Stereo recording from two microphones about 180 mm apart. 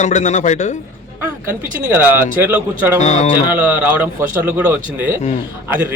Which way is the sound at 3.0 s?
40° left (ahead or behind).